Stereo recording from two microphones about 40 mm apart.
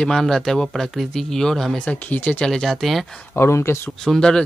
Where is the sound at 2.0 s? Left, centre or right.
Left.